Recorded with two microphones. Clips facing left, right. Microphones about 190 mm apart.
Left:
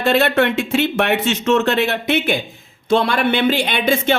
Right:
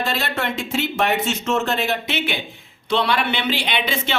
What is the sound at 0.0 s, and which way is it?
Speech, 60° left (ahead or behind).